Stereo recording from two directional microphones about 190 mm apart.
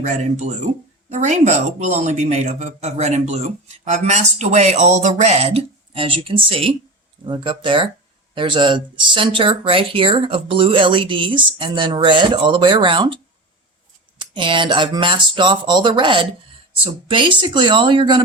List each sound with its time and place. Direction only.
0.0 s speech: 40° right (ahead or behind)
14.2 s speech: 25° right (ahead or behind)